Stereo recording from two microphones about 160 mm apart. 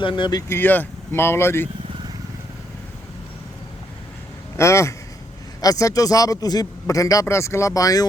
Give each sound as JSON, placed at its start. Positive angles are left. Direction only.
{"t": 0.0, "sound": "speech", "side_deg": 30}
{"t": 4.5, "sound": "a man's voice", "side_deg": 15}